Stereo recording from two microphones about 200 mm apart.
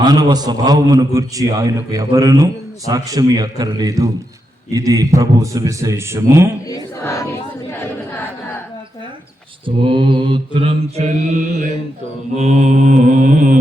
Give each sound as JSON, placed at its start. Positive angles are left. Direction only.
{"t": 0.0, "sound": "a man's voice", "side_deg": -20}
{"t": 6.7, "sound": "speech", "side_deg": 15}
{"t": 9.6, "sound": "mantra", "side_deg": -25}